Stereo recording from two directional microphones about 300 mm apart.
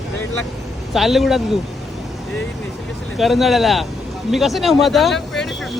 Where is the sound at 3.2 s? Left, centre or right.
Centre.